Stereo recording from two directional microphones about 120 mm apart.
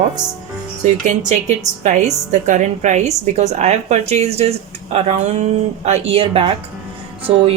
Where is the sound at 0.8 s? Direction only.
85° right.